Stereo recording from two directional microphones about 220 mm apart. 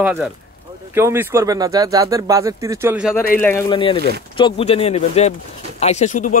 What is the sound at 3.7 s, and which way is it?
Speech, 25° left (ahead or behind).